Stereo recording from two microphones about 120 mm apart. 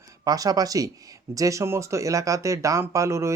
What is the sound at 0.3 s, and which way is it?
Speech, 30° right (ahead or behind).